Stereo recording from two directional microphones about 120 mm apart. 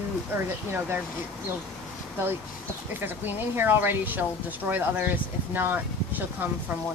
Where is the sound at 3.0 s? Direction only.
15° right (ahead or behind).